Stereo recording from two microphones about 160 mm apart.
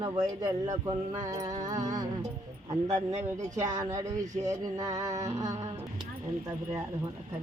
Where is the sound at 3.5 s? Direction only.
20° right (ahead or behind).